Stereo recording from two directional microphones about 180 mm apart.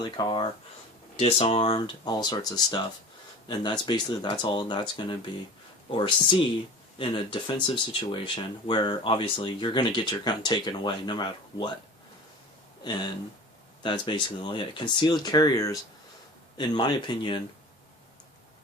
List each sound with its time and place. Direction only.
0.0 s speech: 25° left (ahead or behind)
12.8 s speech: 25° left (ahead or behind)